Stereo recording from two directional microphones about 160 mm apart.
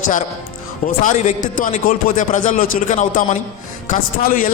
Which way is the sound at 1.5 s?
55° left (ahead or behind).